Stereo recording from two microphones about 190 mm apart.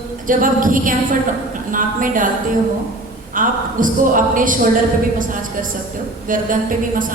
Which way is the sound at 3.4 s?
45° right (ahead or behind).